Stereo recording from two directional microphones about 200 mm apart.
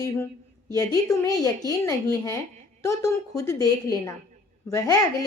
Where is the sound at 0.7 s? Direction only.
15° left (ahead or behind).